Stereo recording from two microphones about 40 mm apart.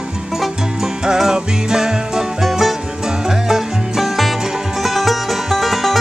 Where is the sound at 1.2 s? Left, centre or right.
Centre.